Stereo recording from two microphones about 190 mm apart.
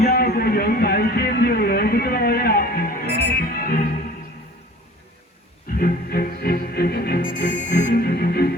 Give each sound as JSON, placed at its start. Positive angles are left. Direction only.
{"t": 0.0, "sound": "a sound", "side_deg": 55}
{"t": 3.2, "sound": "music", "side_deg": 50}
{"t": 5.8, "sound": "music", "side_deg": 50}